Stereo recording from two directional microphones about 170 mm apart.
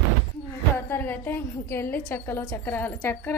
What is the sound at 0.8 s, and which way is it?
A woman's voice, 10° left (ahead or behind).